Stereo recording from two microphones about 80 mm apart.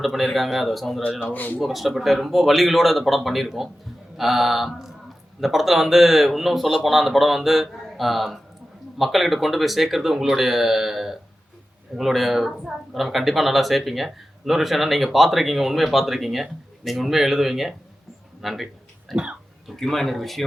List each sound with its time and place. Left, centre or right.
0.0 s speech: centre
1.3 s speech: left
1.6 s speech: centre
18.4 s a sound: centre
19.2 s throat clearing: centre
19.7 s speech: centre